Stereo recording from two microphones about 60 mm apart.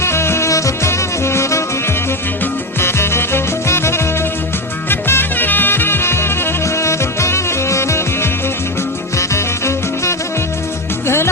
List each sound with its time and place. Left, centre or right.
0.0 s music: left
2.8 s music: left